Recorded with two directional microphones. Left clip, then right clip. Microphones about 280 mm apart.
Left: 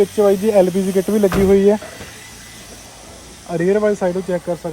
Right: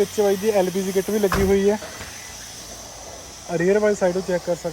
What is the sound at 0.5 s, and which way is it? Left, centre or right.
Speech, centre.